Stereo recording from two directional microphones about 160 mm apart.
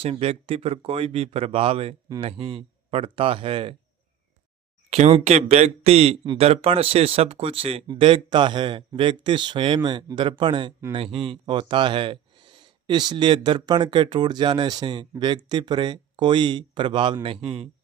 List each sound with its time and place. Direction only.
0.0 s speech: 35° right (ahead or behind)
4.9 s speech: 40° right (ahead or behind)